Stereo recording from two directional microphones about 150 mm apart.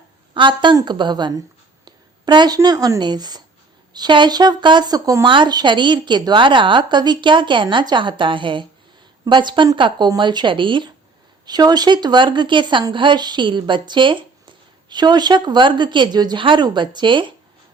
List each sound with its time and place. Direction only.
0.3 s speech: 30° right (ahead or behind)